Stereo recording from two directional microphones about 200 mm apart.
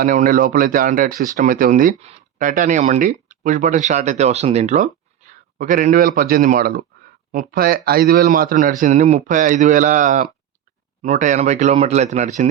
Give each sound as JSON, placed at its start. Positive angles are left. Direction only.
{"t": 0.0, "sound": "a man's voice", "side_deg": -40}